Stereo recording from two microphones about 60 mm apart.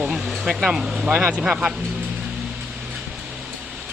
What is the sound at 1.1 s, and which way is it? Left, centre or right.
Speech, right.